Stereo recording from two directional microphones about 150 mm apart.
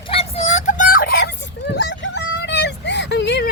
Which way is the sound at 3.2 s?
90° left.